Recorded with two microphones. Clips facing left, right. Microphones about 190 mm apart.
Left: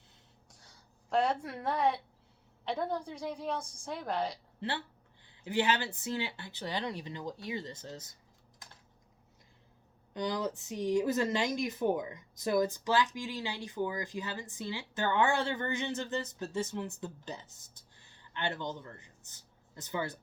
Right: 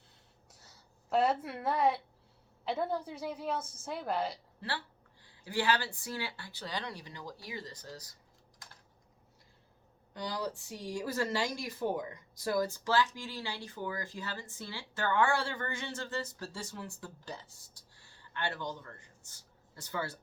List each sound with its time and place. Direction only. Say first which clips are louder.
1.1 s a woman's voice: right 1 dB; 5° right (ahead or behind)
4.6 s speech: left 3 dB; 20° left (ahead or behind)
10.2 s speech: left 4 dB; 20° left (ahead or behind)